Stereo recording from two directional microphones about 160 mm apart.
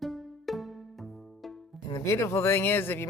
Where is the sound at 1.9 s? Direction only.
20° left (ahead or behind).